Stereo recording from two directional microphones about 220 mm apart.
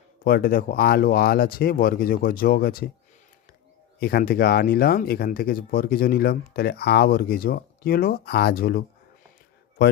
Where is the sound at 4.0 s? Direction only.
45° left (ahead or behind).